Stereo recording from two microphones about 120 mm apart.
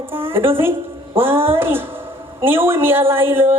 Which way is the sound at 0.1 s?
20° right (ahead or behind).